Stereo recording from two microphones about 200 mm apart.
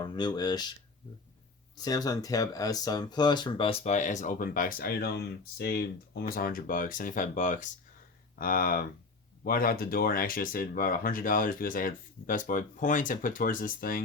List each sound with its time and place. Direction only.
0.0 s speech: 20° left (ahead or behind)
1.7 s speech: 20° left (ahead or behind); by 14.0 s 45° left (ahead or behind)